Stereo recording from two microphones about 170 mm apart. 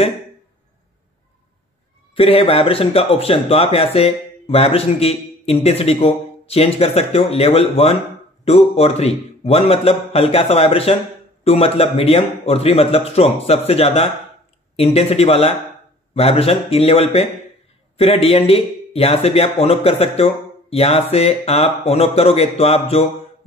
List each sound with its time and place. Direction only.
2.1 s speech: 35° left (ahead or behind)